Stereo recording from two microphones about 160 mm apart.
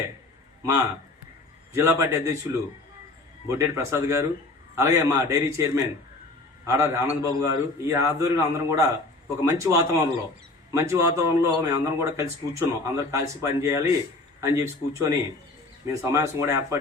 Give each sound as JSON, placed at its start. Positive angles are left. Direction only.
{"t": 0.6, "sound": "a man's voice", "side_deg": -15}
{"t": 3.4, "sound": "a man's voice", "side_deg": -15}